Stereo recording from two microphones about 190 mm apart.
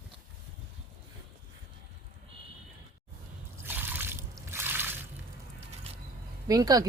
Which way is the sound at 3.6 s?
10° right (ahead or behind).